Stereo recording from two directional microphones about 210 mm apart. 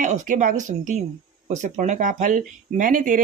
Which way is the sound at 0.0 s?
35° right (ahead or behind).